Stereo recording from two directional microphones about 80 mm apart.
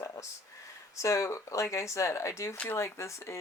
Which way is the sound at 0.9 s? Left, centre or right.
Left.